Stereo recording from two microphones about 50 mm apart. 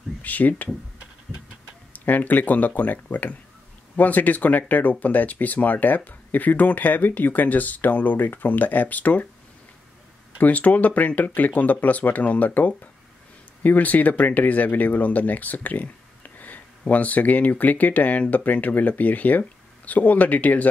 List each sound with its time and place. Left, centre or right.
0.2 s speech: left
1.9 s speech: left
10.4 s speech: left